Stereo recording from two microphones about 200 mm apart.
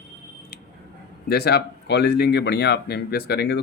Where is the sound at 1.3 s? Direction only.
50° left (ahead or behind).